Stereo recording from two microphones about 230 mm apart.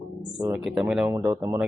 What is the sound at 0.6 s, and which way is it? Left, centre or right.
Speech, centre.